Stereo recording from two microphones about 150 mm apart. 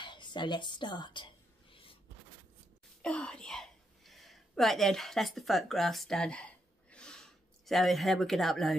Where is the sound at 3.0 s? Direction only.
5° left (ahead or behind).